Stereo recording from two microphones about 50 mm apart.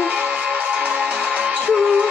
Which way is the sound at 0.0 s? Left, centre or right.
Right.